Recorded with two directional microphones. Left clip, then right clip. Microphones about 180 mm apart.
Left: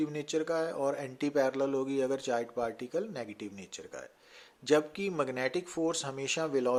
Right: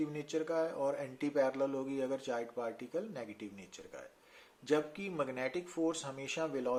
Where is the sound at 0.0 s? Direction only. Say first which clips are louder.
Left 5 dB; 35° left (ahead or behind).